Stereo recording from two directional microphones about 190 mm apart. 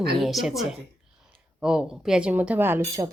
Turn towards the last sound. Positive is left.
turn(degrees=-15)  # may be behind; listen again after turning